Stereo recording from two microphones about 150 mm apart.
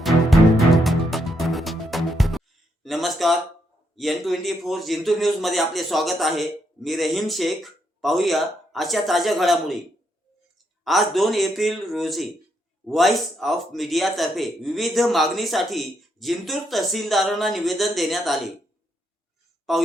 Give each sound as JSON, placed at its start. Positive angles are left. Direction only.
{"t": 0.0, "sound": "music", "side_deg": 0}
{"t": 2.8, "sound": "a sound", "side_deg": 0}
{"t": 3.9, "sound": "a man's voice", "side_deg": 0}
{"t": 10.8, "sound": "a man's voice", "side_deg": 0}
{"t": 19.7, "sound": "a man's voice", "side_deg": 0}